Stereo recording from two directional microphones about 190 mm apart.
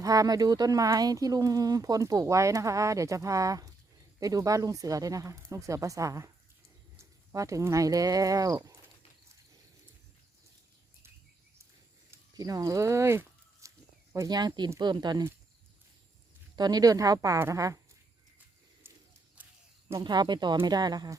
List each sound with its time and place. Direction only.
0.0 s speech: 20° right (ahead or behind)
12.1 s speech: 20° right (ahead or behind)
16.6 s speech: 20° right (ahead or behind)
18.8 s a sound: 10° right (ahead or behind)
19.9 s speech: 20° right (ahead or behind)